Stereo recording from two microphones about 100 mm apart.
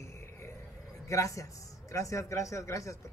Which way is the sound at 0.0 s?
30° left (ahead or behind).